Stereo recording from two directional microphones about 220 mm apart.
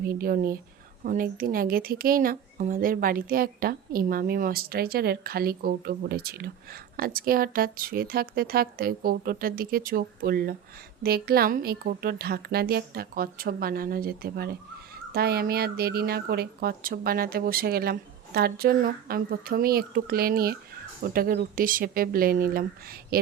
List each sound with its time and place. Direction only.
0.0 s a woman's voice: 40° right (ahead or behind)